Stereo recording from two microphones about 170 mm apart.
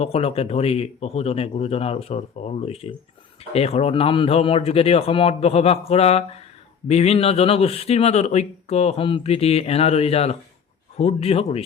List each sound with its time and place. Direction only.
0.0 s speech: 35° left (ahead or behind)